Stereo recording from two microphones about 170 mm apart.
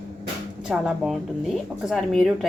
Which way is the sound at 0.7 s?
Centre (ahead or behind).